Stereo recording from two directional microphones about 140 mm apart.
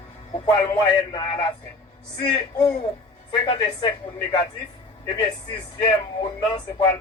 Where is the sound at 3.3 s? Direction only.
30° left (ahead or behind).